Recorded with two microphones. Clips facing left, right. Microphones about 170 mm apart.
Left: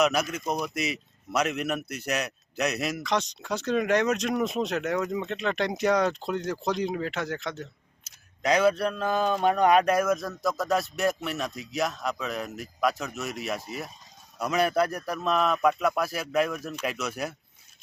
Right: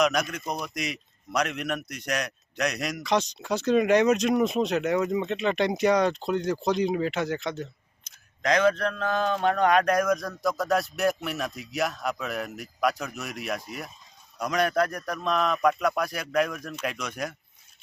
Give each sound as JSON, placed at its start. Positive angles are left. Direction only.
{"t": 0.0, "sound": "speech", "side_deg": 5}